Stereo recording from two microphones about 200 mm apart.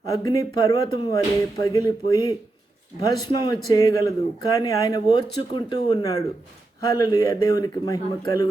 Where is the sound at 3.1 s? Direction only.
20° left (ahead or behind).